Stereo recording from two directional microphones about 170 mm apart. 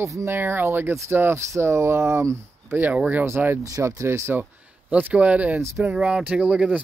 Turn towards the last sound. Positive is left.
turn(degrees=-5)  # may be behind; listen again after turning